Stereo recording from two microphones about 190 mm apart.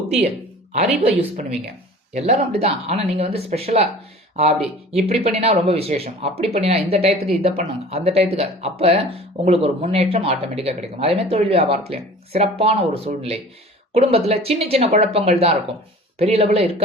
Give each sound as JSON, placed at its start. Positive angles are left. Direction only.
{"t": 0.7, "sound": "speech", "side_deg": -35}
{"t": 4.9, "sound": "speech", "side_deg": -30}